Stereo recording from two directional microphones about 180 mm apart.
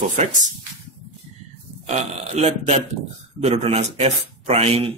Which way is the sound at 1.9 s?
40° right (ahead or behind).